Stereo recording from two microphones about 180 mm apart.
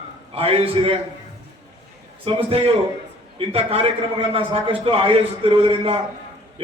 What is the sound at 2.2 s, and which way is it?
A man's voice, 30° right (ahead or behind).